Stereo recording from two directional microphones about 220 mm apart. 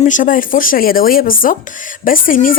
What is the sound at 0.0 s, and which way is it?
A woman's voice, 35° left (ahead or behind).